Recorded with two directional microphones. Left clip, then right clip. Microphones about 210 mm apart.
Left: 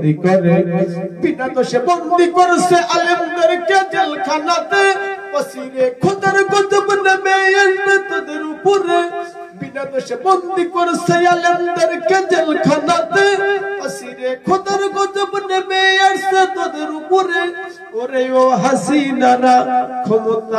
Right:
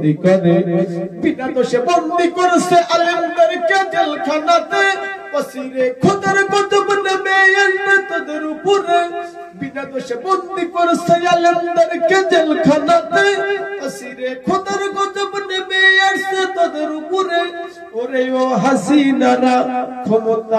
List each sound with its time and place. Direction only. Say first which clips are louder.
0.0 s a man's voice: even; 50° left (ahead or behind)